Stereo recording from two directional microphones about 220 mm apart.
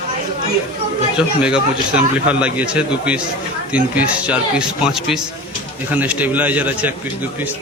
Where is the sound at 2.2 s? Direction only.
5° right (ahead or behind).